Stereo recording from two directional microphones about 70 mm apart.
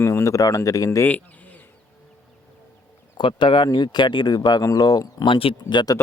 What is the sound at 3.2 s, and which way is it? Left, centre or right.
Speech, left.